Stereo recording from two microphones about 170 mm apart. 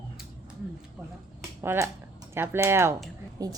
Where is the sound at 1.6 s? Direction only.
15° right (ahead or behind).